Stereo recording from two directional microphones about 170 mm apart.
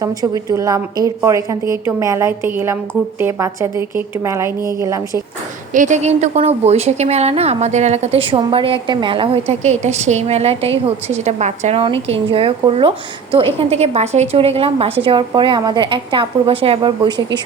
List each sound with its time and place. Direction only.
0.0 s a woman's voice: 20° right (ahead or behind)
5.7 s a woman's voice: 45° right (ahead or behind); by 17.4 s 25° right (ahead or behind)